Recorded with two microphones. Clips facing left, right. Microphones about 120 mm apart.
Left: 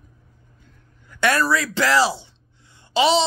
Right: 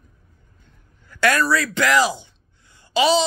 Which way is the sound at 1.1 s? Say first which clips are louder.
Right 1 dB; 20° left (ahead or behind).